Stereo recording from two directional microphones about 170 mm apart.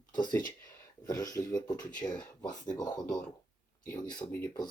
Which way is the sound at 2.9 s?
5° left (ahead or behind).